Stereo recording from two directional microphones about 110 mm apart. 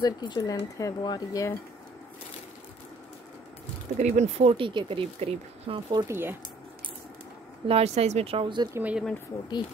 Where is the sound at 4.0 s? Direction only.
90° right.